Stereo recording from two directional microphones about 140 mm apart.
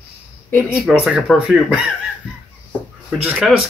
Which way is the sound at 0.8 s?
10° right (ahead or behind).